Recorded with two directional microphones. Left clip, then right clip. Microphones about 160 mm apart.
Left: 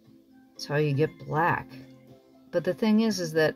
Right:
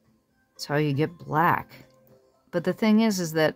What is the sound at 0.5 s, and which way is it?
Speech, 60° right (ahead or behind).